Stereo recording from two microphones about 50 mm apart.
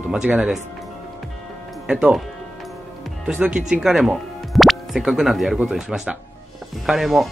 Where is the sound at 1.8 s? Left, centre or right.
Centre.